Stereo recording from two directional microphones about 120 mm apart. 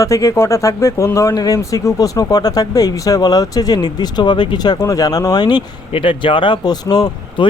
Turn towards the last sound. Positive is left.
turn(degrees=35)  # may be behind; listen again after turning